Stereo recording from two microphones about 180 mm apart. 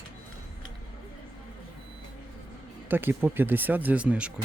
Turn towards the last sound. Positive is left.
turn(degrees=-5)  # may be behind; listen again after turning